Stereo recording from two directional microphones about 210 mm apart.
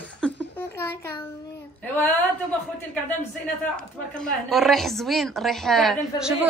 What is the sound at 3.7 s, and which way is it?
A woman's voice, 5° left (ahead or behind).